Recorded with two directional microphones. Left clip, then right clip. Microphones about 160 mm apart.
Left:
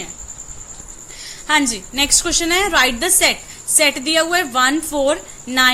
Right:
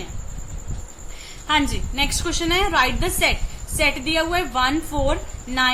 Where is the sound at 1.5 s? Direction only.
35° left (ahead or behind).